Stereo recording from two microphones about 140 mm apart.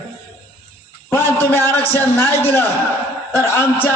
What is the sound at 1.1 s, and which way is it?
A man's voice, 15° left (ahead or behind).